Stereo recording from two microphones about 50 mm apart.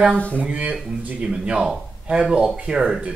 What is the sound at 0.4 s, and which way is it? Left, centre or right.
Speech, right.